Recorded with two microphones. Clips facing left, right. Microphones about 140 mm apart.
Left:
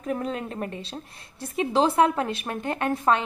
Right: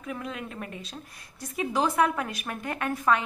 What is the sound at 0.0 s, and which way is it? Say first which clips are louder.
A woman's voice: left 6 dB; 40° left (ahead or behind).